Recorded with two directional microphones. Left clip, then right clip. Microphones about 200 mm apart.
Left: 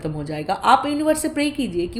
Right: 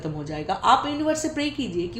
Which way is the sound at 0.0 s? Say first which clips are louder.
Left 3 dB; 50° left (ahead or behind).